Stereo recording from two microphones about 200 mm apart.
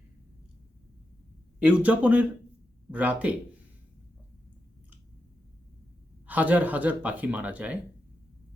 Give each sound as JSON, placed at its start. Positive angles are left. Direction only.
{"t": 1.8, "sound": "speech", "side_deg": -5}
{"t": 6.2, "sound": "speech", "side_deg": -10}